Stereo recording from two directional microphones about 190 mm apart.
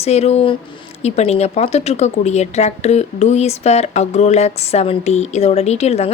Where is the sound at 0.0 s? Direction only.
35° left (ahead or behind).